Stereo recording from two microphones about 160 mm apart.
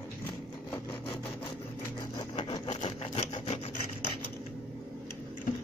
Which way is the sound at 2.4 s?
40° left (ahead or behind).